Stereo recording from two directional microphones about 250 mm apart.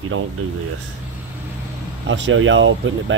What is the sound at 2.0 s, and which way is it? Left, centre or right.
Speech, right.